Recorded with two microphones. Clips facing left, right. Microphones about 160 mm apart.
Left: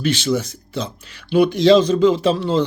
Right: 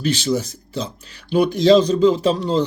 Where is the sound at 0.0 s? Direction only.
35° right (ahead or behind).